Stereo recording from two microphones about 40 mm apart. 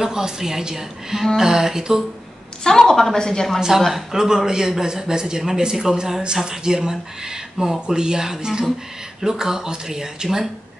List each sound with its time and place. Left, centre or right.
0.0 s speech: centre
2.6 s a woman's voice: centre
3.9 s speech: centre
7.8 s speech: centre